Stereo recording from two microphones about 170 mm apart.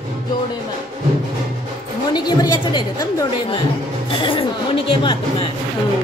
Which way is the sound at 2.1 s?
25° left (ahead or behind).